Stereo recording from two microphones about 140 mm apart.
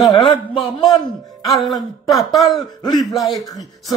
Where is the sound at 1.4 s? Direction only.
Centre (ahead or behind).